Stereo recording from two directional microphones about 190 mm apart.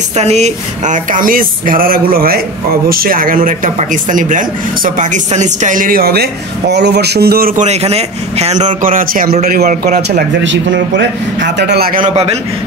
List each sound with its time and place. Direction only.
0.2 s a man's voice: 35° right (ahead or behind); by 7.6 s 50° right (ahead or behind)
7.6 s a man's voice: 35° right (ahead or behind)
10.4 s a man's voice: 75° right (ahead or behind); by 12.1 s 50° right (ahead or behind)